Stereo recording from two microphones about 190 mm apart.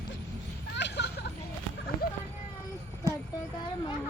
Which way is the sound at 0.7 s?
65° left (ahead or behind).